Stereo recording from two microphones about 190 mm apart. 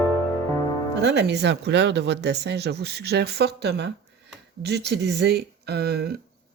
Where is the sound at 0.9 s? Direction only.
65° right (ahead or behind).